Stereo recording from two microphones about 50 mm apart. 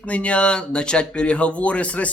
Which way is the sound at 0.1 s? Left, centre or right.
Left.